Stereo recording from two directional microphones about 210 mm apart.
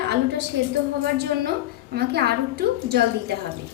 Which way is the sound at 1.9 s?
50° right (ahead or behind).